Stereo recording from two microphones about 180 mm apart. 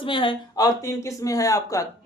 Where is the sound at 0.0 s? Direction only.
30° left (ahead or behind).